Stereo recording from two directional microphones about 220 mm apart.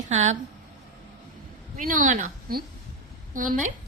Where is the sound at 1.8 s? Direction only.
35° right (ahead or behind).